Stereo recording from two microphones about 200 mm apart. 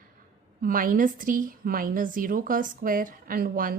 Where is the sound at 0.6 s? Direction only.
45° right (ahead or behind).